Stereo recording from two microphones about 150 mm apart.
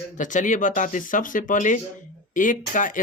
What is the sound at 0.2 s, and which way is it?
Speech, 60° left (ahead or behind).